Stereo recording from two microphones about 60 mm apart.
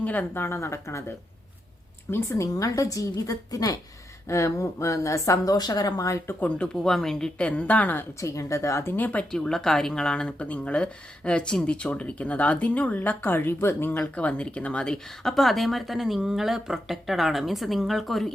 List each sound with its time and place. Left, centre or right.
0.0 s speech: left
0.3 s speech: left
2.0 s speech: left
2.4 s a woman's voice: left
4.3 s speech: left
6.3 s speech: left
6.8 s speech: centre; by 8.0 s left
8.2 s speech: left
9.3 s speech: centre; by 13.9 s left
14.2 s speech: centre